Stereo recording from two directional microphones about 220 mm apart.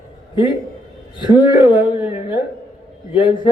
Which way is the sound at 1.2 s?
20° left (ahead or behind).